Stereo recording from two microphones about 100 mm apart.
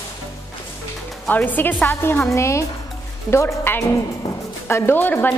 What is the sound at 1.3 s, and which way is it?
A woman's voice, 15° left (ahead or behind).